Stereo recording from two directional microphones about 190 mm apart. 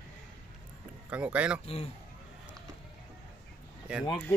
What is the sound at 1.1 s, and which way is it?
Speech, 5° right (ahead or behind).